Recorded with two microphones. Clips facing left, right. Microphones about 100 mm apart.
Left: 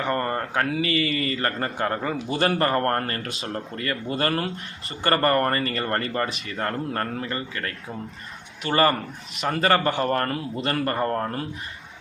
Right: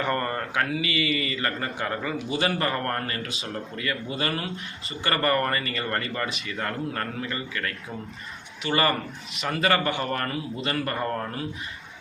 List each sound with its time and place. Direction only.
0.1 s a sound: 30° left (ahead or behind)
0.8 s speech: 40° left (ahead or behind)
2.3 s speech: 45° left (ahead or behind)